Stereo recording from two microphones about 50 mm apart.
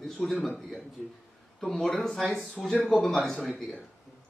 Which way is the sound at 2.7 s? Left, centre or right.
Left.